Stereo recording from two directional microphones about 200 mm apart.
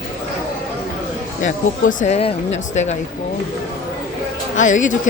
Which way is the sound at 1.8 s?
40° left (ahead or behind).